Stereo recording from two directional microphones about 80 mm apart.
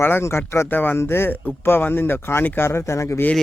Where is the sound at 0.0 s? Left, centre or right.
Left.